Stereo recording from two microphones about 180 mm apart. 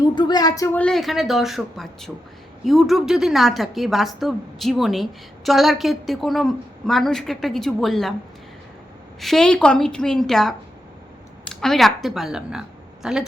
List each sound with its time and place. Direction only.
0.2 s a woman's voice: 25° left (ahead or behind); by 8.1 s centre (ahead or behind)
9.2 s a woman's voice: 5° left (ahead or behind)